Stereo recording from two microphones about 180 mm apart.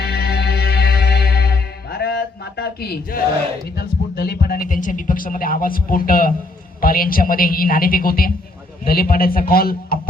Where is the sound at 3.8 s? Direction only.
60° left (ahead or behind).